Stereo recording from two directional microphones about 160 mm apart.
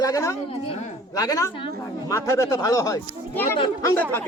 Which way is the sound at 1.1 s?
20° left (ahead or behind).